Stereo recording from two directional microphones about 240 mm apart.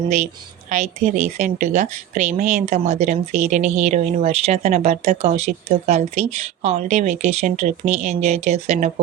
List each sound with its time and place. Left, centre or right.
0.7 s speech: right